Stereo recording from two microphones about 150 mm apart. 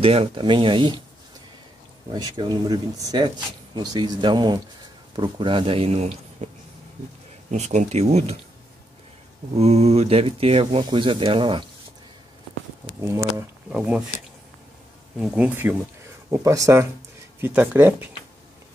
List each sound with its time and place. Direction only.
0.0 s speech: 40° right (ahead or behind)
2.1 s speech: 30° right (ahead or behind); by 6.5 s 50° right (ahead or behind)
7.5 s speech: 50° right (ahead or behind)
9.6 s speech: 45° right (ahead or behind)
13.0 s speech: 20° right (ahead or behind)
13.7 s speech: 5° right (ahead or behind)
15.1 s speech: 5° right (ahead or behind)